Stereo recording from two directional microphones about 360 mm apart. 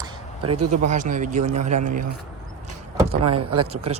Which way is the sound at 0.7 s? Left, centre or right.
Centre.